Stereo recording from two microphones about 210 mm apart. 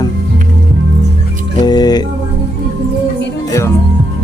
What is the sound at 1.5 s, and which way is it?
Music, 20° left (ahead or behind).